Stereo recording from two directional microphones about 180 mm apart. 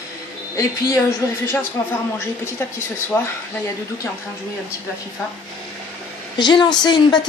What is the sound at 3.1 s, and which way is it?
Speech, 10° left (ahead or behind).